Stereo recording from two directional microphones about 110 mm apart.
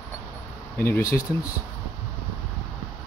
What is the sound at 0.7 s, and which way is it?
Speech, 15° left (ahead or behind).